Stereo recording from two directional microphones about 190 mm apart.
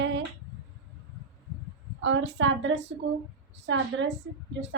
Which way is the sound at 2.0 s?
80° right.